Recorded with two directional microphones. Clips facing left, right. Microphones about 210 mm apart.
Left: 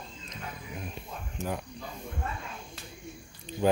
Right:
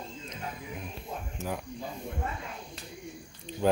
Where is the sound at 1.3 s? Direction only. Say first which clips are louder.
Left 2 dB; centre (ahead or behind).